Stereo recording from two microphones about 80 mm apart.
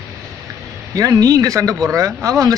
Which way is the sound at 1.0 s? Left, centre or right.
Right.